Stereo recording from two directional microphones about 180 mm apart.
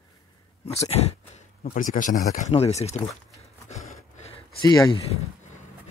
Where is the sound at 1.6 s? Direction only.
50° left (ahead or behind).